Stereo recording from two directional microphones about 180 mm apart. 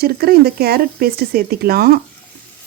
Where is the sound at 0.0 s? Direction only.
60° right (ahead or behind).